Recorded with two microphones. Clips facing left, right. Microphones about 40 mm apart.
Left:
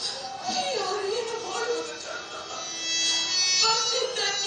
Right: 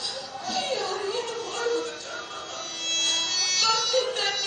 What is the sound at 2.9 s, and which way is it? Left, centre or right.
Music, right.